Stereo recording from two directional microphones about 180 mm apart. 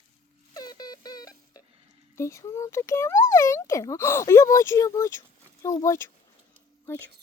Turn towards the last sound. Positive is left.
turn(degrees=15)  # may be behind; listen again after turning